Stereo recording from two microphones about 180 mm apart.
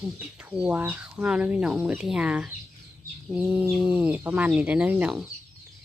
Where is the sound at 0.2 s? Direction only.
5° right (ahead or behind).